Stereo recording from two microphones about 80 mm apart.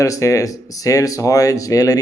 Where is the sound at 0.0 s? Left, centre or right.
Left.